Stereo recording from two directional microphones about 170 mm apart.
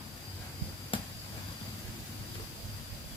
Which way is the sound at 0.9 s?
30° left (ahead or behind).